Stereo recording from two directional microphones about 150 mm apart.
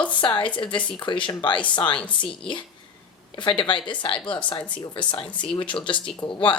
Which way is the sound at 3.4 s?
30° left (ahead or behind).